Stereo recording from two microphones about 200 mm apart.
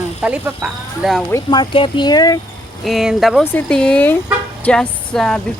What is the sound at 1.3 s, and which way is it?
Speech, 20° left (ahead or behind).